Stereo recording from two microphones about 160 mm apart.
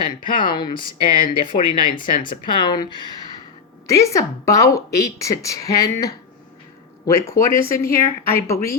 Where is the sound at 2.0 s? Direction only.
30° left (ahead or behind).